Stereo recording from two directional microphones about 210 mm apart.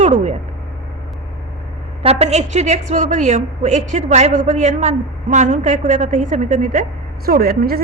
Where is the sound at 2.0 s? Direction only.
30° right (ahead or behind).